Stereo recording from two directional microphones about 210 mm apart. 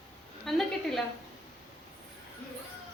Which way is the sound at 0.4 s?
Centre (ahead or behind).